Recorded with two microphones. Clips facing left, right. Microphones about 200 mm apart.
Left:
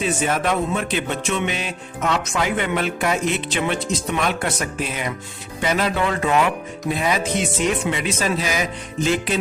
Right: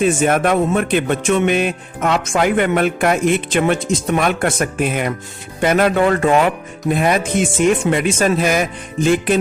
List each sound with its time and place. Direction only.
0.0 s speech: 50° right (ahead or behind)